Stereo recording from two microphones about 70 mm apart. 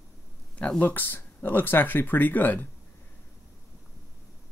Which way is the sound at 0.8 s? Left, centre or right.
Left.